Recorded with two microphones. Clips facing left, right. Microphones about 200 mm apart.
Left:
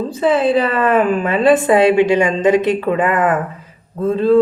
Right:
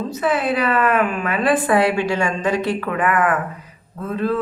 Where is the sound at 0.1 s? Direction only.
25° left (ahead or behind).